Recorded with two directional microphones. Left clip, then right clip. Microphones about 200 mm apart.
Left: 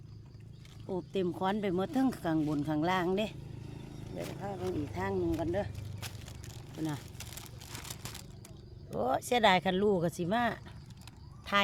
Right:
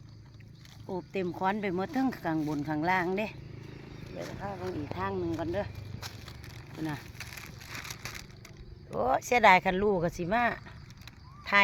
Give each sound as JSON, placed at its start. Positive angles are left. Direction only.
{"t": 0.9, "sound": "speech", "side_deg": 10}
{"t": 2.4, "sound": "speech", "side_deg": -5}
{"t": 2.6, "sound": "speech", "side_deg": 10}
{"t": 4.4, "sound": "speech", "side_deg": 15}
{"t": 6.0, "sound": "a sound", "side_deg": 20}
{"t": 9.0, "sound": "speech", "side_deg": 5}